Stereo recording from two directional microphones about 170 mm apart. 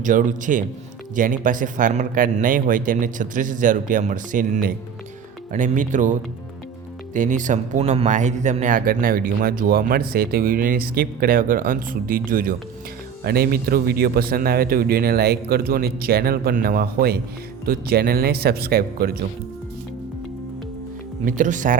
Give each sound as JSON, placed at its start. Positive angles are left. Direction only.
{"t": 0.0, "sound": "speech", "side_deg": -50}
{"t": 21.2, "sound": "speech", "side_deg": -50}